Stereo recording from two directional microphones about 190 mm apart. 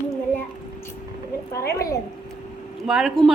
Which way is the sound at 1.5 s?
15° left (ahead or behind).